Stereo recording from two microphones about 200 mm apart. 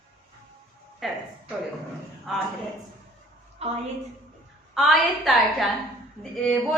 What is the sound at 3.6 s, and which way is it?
Speech, 30° right (ahead or behind).